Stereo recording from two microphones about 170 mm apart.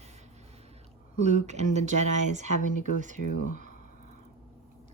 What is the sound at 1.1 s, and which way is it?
Speech, 45° right (ahead or behind).